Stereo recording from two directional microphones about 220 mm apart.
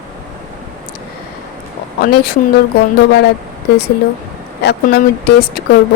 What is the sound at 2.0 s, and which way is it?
Speech, 45° left (ahead or behind).